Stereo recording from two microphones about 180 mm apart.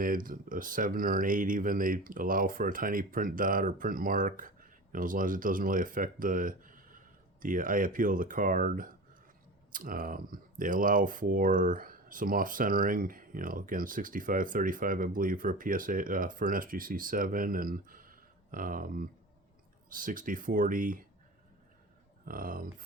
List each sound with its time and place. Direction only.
0.0 s speech: 50° right (ahead or behind)
22.3 s speech: 50° right (ahead or behind)